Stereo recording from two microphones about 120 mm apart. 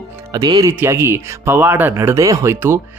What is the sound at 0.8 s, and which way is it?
Speech, 20° right (ahead or behind).